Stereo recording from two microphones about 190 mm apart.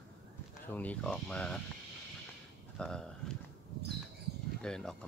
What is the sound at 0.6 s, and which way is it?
Speech, 10° left (ahead or behind).